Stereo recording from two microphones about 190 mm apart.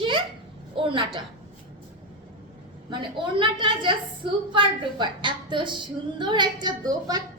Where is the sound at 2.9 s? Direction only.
25° right (ahead or behind).